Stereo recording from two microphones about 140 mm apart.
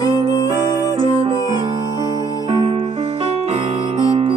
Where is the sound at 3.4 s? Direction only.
50° right (ahead or behind).